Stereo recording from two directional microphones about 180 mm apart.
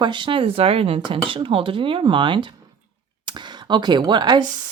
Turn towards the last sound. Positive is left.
turn(degrees=-25)  # may be behind; listen again after turning